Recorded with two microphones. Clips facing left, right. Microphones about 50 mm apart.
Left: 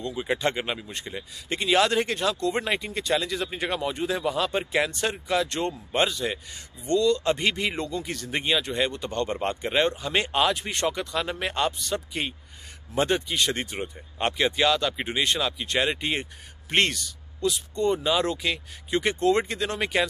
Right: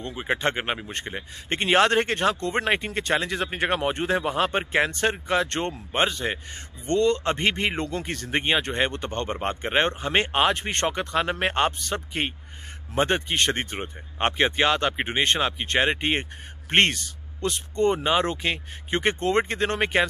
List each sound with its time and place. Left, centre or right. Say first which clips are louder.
0.0 s speech: right 1 dB; right